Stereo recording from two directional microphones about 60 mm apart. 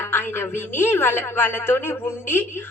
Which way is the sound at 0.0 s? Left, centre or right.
Left.